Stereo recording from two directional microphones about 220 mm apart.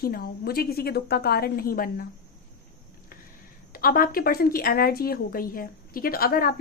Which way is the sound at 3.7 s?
40° left (ahead or behind).